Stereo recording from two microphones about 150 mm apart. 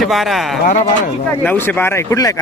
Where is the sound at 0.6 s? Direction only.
60° left (ahead or behind).